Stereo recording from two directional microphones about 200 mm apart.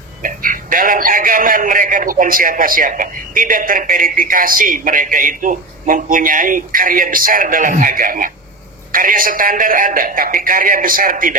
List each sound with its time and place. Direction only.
0.2 s a man's voice: 45° right (ahead or behind)